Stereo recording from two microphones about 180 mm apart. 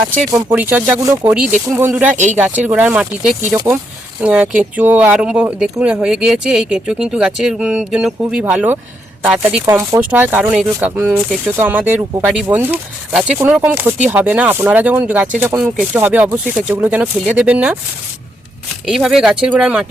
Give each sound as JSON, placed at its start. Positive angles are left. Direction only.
{"t": 0.3, "sound": "speech", "side_deg": -20}
{"t": 2.1, "sound": "speech", "side_deg": -40}
{"t": 2.4, "sound": "speech", "side_deg": -10}
{"t": 18.9, "sound": "speech", "side_deg": 0}